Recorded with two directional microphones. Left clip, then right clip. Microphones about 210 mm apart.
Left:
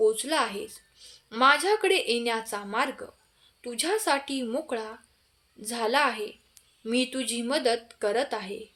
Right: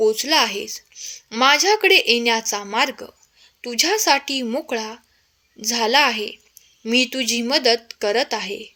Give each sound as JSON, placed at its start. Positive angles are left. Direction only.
{"t": 0.0, "sound": "a woman's voice", "side_deg": -35}